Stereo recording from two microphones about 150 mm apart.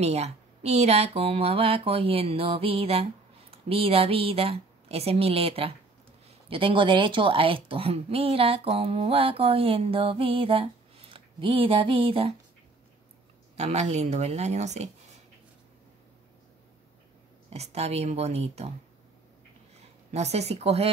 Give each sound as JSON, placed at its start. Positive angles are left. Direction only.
{"t": 0.0, "sound": "speech", "side_deg": -45}
{"t": 13.6, "sound": "speech", "side_deg": -45}
{"t": 17.5, "sound": "speech", "side_deg": -45}
{"t": 20.1, "sound": "speech", "side_deg": -45}